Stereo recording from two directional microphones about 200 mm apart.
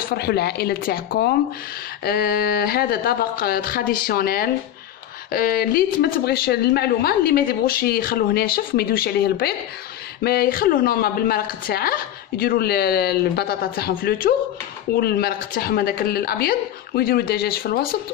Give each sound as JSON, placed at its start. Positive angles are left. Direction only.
{"t": 0.1, "sound": "a woman's voice", "side_deg": 55}